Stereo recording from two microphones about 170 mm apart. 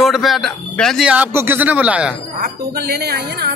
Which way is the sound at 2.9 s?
70° right (ahead or behind).